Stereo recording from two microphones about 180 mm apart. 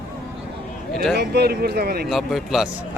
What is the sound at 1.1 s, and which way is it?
Speech, 65° right (ahead or behind).